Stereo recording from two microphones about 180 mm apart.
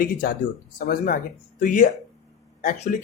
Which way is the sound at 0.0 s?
55° left (ahead or behind).